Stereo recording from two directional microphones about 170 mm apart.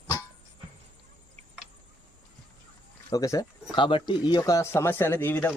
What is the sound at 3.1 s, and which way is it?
Speech, 20° left (ahead or behind).